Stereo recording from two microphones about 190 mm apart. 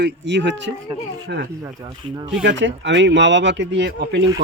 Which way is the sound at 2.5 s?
70° right (ahead or behind).